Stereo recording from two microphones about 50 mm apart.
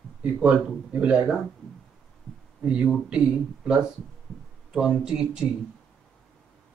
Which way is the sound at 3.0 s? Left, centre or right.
Centre.